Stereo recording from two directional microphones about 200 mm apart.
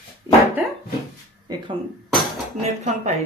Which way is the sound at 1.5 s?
20° right (ahead or behind).